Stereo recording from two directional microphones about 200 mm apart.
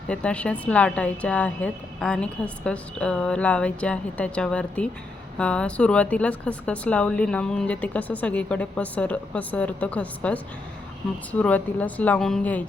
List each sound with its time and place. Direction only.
0.1 s speech: 5° left (ahead or behind)